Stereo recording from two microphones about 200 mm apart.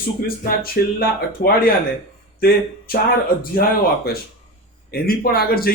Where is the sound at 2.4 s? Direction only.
50° left (ahead or behind).